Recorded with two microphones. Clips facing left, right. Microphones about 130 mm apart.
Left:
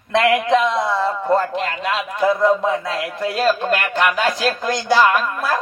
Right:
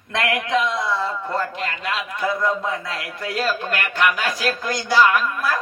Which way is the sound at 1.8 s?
25° left (ahead or behind).